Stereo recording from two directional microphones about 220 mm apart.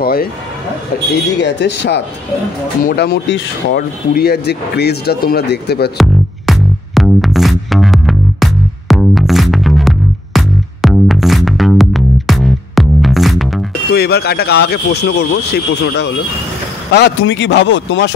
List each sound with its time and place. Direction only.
0.0 s speech: 40° left (ahead or behind)
1.4 s speech: 50° left (ahead or behind)
5.9 s music: centre (ahead or behind)
13.9 s speech: 45° left (ahead or behind)